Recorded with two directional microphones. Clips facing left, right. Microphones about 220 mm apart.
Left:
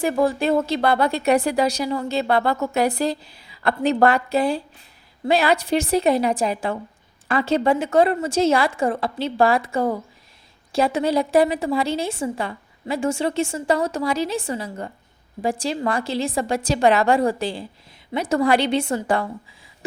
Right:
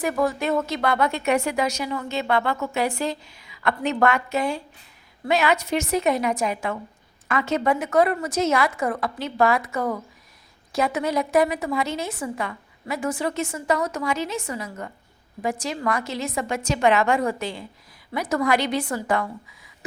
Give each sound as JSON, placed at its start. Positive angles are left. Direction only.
{"t": 0.0, "sound": "a woman's voice", "side_deg": 30}